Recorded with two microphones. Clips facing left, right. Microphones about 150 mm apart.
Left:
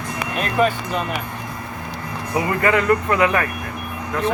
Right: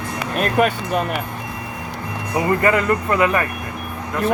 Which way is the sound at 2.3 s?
Centre (ahead or behind).